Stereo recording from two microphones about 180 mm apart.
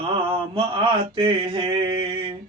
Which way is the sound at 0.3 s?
30° right (ahead or behind).